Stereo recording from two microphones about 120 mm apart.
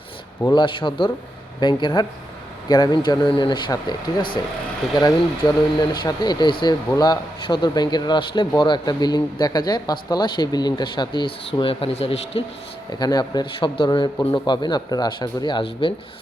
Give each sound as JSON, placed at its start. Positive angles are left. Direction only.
{"t": 0.5, "sound": "a man's voice", "side_deg": 45}
{"t": 5.4, "sound": "a man's voice", "side_deg": 35}
{"t": 13.0, "sound": "a man's voice", "side_deg": 35}